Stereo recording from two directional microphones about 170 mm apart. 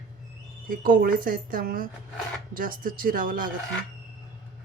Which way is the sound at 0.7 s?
55° right (ahead or behind).